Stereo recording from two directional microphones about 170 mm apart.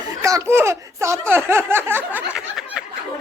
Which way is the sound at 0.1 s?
20° right (ahead or behind).